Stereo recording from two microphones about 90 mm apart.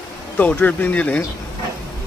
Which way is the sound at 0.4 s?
15° left (ahead or behind).